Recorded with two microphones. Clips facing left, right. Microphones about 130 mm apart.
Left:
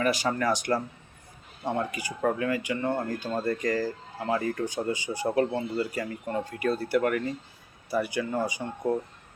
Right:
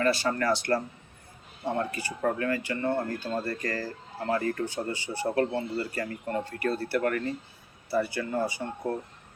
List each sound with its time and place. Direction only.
0.0 s speech: 15° left (ahead or behind)